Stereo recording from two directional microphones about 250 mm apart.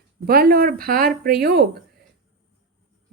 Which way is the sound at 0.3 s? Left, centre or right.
Right.